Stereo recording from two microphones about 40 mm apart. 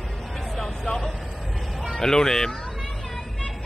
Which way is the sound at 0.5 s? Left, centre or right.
Centre.